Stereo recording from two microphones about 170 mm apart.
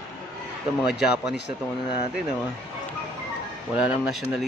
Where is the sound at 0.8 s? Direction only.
5° right (ahead or behind).